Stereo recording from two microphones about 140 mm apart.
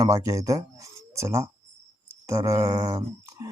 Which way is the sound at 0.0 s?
25° right (ahead or behind).